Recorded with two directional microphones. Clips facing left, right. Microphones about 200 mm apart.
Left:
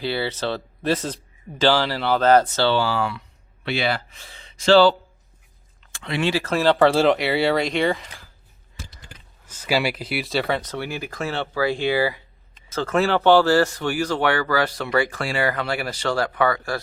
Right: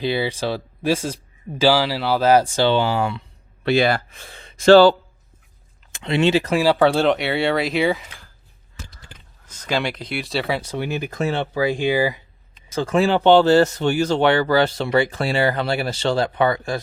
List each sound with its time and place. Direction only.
0.0 s speech: 15° right (ahead or behind)
3.6 s speech: 45° right (ahead or behind)
5.9 s speech: 25° right (ahead or behind)
6.7 s speech: centre (ahead or behind)
9.5 s speech: 10° left (ahead or behind); by 16.8 s 20° right (ahead or behind)